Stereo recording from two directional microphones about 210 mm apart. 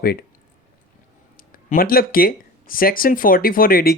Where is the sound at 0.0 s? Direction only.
45° left (ahead or behind).